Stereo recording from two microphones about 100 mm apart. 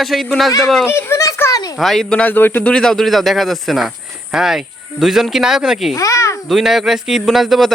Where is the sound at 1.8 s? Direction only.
Centre (ahead or behind).